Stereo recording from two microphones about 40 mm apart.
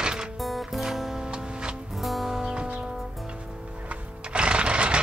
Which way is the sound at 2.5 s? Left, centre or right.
Right.